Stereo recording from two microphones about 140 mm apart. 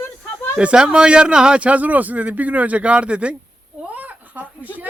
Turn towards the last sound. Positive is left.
turn(degrees=-10)  # may be behind; listen again after turning